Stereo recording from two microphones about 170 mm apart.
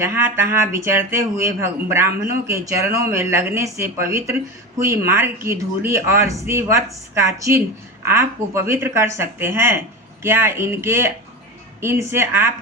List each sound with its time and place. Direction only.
0.0 s a man's voice: 15° right (ahead or behind)